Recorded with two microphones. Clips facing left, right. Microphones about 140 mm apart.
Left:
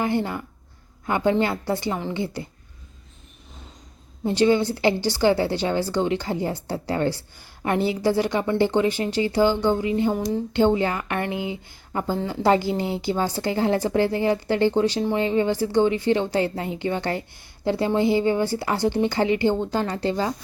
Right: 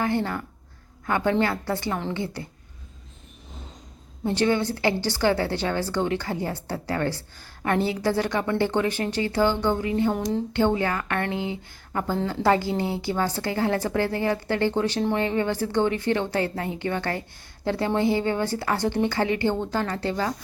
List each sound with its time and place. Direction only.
0.0 s a woman's voice: 15° left (ahead or behind)
4.2 s a woman's voice: 15° left (ahead or behind)
10.2 s speech: 5° left (ahead or behind)
10.5 s a woman's voice: 20° left (ahead or behind)